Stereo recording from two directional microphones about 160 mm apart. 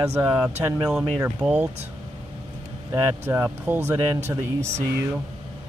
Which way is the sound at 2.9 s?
15° right (ahead or behind).